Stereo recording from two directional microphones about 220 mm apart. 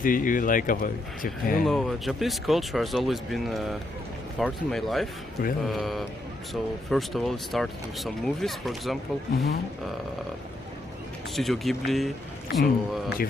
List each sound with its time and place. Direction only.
0.0 s speech: 40° left (ahead or behind)
1.6 s speech: centre (ahead or behind)
9.3 s speech: 45° left (ahead or behind)
11.3 s speech: centre (ahead or behind)